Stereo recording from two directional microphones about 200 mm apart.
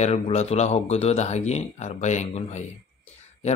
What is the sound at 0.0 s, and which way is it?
Speech, 35° left (ahead or behind).